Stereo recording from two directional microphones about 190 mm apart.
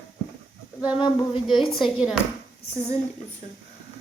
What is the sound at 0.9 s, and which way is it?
Female singing, 25° left (ahead or behind).